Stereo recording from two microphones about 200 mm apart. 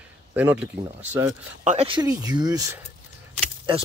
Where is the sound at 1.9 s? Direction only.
20° right (ahead or behind).